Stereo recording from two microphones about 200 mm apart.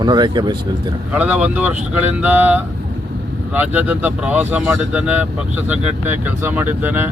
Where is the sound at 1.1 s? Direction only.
5° right (ahead or behind).